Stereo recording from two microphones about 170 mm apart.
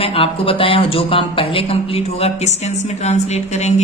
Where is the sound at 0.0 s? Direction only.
35° left (ahead or behind).